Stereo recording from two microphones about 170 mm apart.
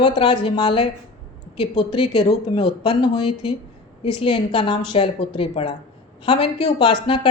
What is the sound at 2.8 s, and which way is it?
A woman's voice, 25° left (ahead or behind).